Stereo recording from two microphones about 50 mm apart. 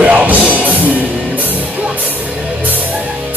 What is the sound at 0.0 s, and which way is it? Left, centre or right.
Music, right.